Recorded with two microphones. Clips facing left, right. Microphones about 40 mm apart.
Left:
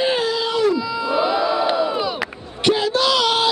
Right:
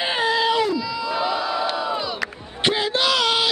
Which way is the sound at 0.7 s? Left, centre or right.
Centre.